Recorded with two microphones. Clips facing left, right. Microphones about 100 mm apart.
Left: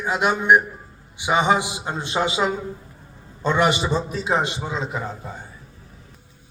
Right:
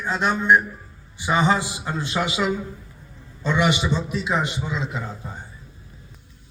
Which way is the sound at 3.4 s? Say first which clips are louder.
Left 2 dB; 40° left (ahead or behind).